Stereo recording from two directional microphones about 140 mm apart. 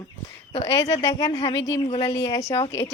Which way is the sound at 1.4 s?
40° left (ahead or behind).